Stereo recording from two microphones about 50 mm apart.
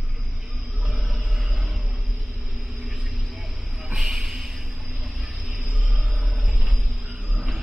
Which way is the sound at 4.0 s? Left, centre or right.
Centre.